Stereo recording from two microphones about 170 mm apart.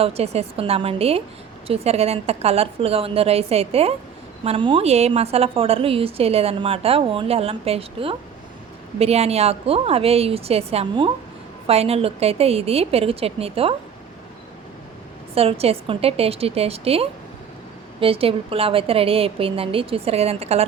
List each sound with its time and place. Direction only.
0.0 s a woman's voice: 35° right (ahead or behind)
15.4 s a woman's voice: 35° right (ahead or behind)